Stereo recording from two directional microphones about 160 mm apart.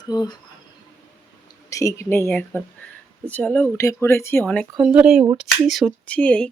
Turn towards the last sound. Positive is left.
turn(degrees=10)  # may be behind; listen again after turning